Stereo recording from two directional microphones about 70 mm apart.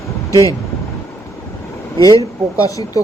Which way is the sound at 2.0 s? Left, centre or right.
Left.